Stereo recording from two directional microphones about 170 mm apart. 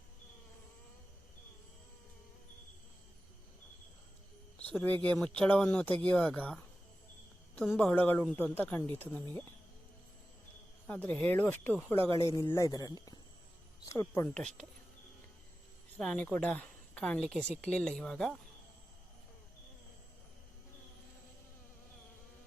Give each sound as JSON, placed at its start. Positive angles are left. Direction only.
{"t": 4.7, "sound": "speech", "side_deg": 10}
{"t": 10.8, "sound": "a man's voice", "side_deg": 10}
{"t": 14.2, "sound": "speech", "side_deg": 5}
{"t": 16.0, "sound": "a woman's voice", "side_deg": 5}